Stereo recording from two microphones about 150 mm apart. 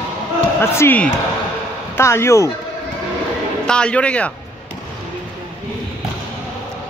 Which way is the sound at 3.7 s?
5° left (ahead or behind).